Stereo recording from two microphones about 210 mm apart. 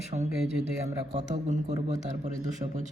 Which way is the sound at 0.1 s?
30° right (ahead or behind).